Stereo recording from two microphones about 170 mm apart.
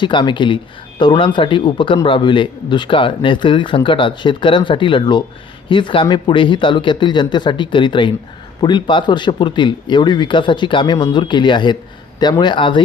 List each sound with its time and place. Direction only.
0.0 s speech: 25° left (ahead or behind)